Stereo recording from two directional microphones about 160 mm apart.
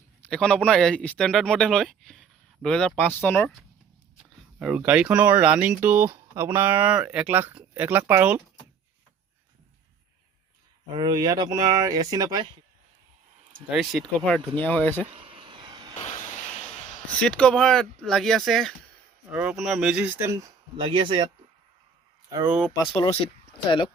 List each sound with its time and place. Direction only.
0.3 s speech: 5° left (ahead or behind)
4.6 s speech: 5° right (ahead or behind)
10.9 s speech: 25° right (ahead or behind)
13.7 s speech: centre (ahead or behind)
14.6 s speech: 10° left (ahead or behind)
15.1 s a sound: 35° right (ahead or behind)
16.0 s hiss: 45° left (ahead or behind)
17.2 s speech: 5° left (ahead or behind); by 20.8 s 20° right (ahead or behind)
20.8 s speech: 30° right (ahead or behind)
22.9 s speech: 35° left (ahead or behind)